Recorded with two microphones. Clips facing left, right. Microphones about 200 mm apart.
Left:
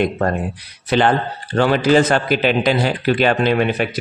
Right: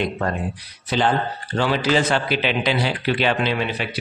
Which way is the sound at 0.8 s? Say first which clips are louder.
Left 5 dB; 65° left (ahead or behind).